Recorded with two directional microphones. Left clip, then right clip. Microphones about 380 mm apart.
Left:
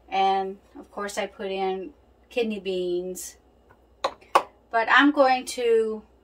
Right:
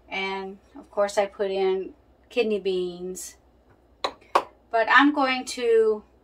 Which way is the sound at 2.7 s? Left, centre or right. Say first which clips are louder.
Left 1 dB; centre.